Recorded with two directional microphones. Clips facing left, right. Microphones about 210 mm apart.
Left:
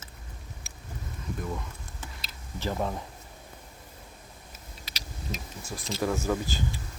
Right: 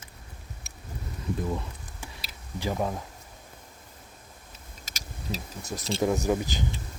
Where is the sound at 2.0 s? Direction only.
15° right (ahead or behind).